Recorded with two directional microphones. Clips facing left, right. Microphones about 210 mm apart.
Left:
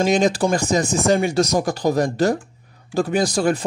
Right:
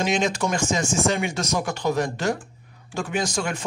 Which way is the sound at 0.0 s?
35° left (ahead or behind).